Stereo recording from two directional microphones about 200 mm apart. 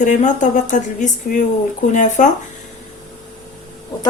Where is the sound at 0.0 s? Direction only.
40° left (ahead or behind).